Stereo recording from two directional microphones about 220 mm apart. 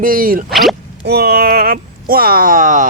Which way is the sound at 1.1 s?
45° right (ahead or behind).